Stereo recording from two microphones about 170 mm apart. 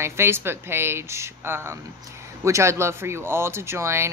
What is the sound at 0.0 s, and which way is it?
A woman's voice, 15° right (ahead or behind).